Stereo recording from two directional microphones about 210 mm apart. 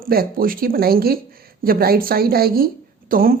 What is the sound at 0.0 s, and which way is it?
Speech, 45° right (ahead or behind).